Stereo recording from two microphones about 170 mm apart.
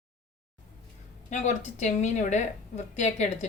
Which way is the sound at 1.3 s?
45° left (ahead or behind).